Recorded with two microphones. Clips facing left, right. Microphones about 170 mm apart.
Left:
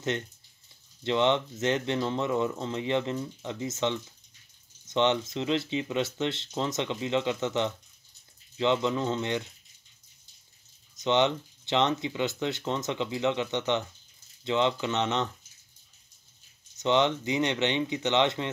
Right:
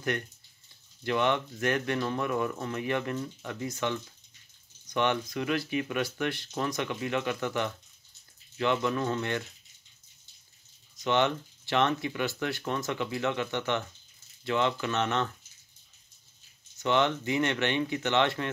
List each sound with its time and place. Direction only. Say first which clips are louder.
1.0 s speech: left 2 dB; 20° left (ahead or behind)
11.0 s speech: left 2 dB; 20° left (ahead or behind)
16.7 s speech: left 2 dB; 20° left (ahead or behind)